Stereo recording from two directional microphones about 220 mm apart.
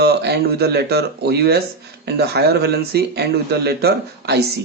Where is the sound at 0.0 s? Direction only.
50° right (ahead or behind).